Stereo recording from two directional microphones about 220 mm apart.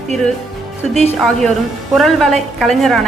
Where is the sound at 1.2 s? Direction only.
5° left (ahead or behind).